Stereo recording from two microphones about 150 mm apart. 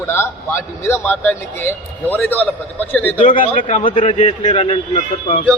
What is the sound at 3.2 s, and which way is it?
Speech, 55° left (ahead or behind).